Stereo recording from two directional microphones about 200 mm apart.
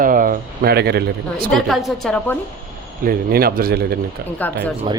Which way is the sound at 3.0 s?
50° right (ahead or behind).